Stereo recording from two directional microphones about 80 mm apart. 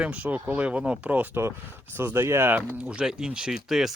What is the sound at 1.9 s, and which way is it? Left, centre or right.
Speech, right.